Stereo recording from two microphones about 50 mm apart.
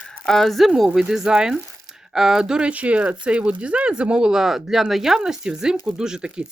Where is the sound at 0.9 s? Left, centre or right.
Centre.